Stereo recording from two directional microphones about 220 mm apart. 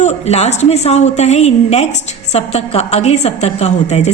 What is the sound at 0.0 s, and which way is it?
A woman's voice, 30° left (ahead or behind).